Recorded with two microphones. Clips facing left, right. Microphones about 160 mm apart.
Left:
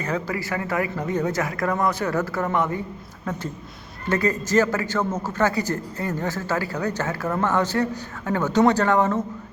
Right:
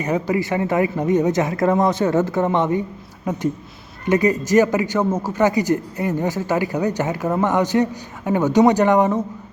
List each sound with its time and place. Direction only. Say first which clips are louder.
0.0 s a man's voice: right 6 dB; 20° right (ahead or behind)